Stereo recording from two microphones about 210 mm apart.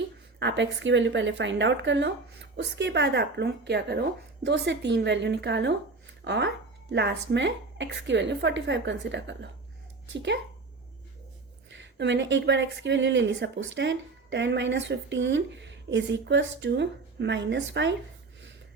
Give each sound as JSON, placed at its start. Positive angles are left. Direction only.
{"t": 0.3, "sound": "speech", "side_deg": -55}
{"t": 11.7, "sound": "speech", "side_deg": -60}